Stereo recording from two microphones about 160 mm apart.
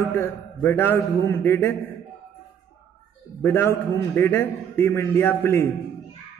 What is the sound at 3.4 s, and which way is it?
A man's voice, 10° left (ahead or behind).